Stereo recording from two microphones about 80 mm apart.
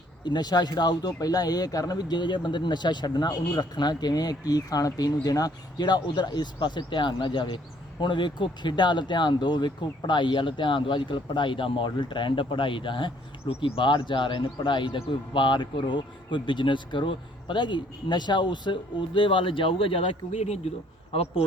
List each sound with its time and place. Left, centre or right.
0.3 s speech: left
8.0 s speech: left